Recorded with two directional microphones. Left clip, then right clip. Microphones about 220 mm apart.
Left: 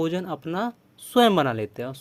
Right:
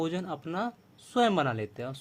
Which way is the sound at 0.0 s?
30° left (ahead or behind).